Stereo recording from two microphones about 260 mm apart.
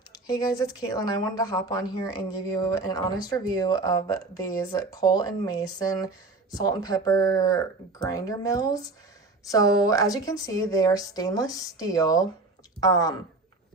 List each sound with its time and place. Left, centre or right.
0.1 s speech: centre